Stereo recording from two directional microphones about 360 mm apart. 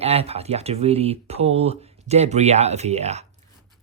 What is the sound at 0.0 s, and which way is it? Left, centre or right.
Speech, centre.